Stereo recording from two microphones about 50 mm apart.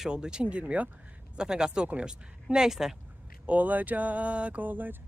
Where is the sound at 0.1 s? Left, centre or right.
Centre.